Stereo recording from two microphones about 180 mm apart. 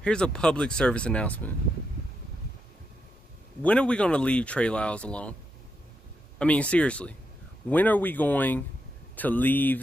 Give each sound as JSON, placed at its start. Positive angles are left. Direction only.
{"t": 0.0, "sound": "speech", "side_deg": 5}
{"t": 3.6, "sound": "speech", "side_deg": 5}
{"t": 6.3, "sound": "speech", "side_deg": 5}